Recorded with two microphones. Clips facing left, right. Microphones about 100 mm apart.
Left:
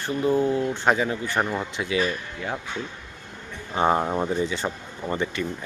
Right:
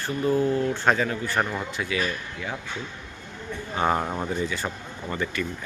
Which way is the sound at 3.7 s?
25° left (ahead or behind).